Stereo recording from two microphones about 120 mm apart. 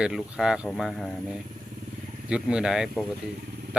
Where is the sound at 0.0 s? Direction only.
5° right (ahead or behind).